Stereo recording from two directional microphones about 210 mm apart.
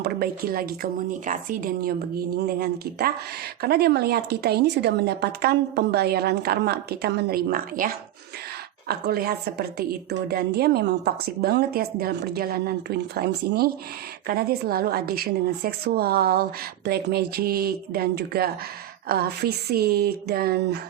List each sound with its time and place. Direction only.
0.0 s a woman's voice: 45° right (ahead or behind)